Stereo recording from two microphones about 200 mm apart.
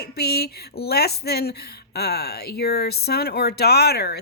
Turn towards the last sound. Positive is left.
turn(degrees=55)  # may be behind; listen again after turning